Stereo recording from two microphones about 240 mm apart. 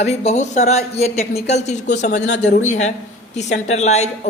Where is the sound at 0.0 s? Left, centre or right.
Left.